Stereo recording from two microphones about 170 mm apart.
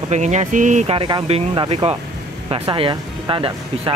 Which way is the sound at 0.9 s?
30° right (ahead or behind).